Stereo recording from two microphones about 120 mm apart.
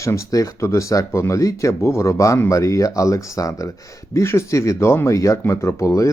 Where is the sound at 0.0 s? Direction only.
25° left (ahead or behind).